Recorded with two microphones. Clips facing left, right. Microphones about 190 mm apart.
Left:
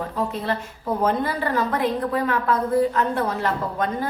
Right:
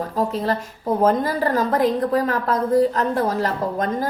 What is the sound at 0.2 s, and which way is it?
A woman's voice, 40° right (ahead or behind).